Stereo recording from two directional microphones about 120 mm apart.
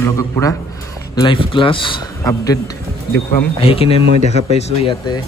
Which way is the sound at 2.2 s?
30° left (ahead or behind).